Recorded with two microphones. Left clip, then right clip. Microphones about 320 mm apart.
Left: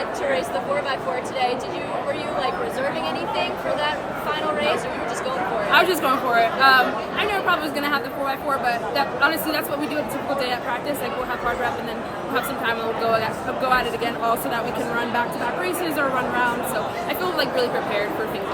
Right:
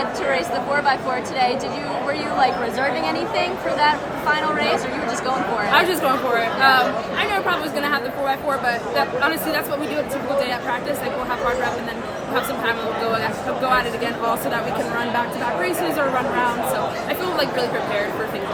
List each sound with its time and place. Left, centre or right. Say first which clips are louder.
3.8 s speech: right 5 dB; right
5.7 s speech: even; centre
12.3 s speech: right 2 dB; centre